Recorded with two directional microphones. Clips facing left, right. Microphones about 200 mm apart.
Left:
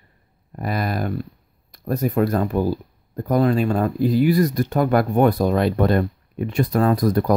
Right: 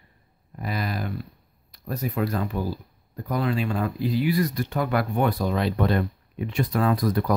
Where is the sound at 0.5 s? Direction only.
50° left (ahead or behind).